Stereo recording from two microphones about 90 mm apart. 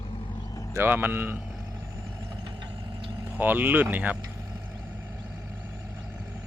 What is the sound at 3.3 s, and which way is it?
Speech, 20° right (ahead or behind).